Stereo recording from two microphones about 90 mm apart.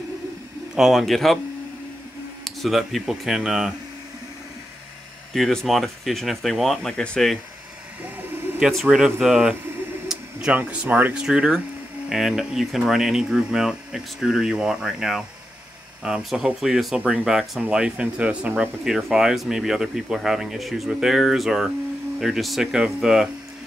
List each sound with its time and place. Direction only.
0.7 s speech: 5° right (ahead or behind)
2.4 s speech: centre (ahead or behind)
5.3 s speech: 5° left (ahead or behind)
8.5 s speech: 5° right (ahead or behind)
11.1 s speech: 10° right (ahead or behind)